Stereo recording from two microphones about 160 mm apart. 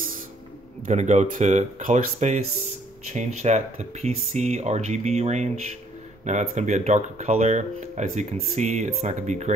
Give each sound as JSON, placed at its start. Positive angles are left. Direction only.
{"t": 0.8, "sound": "speech", "side_deg": -45}